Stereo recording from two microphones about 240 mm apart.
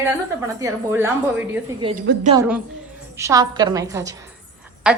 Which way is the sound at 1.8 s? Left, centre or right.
Right.